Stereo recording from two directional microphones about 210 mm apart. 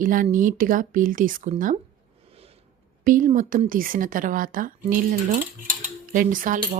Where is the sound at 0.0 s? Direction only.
40° right (ahead or behind).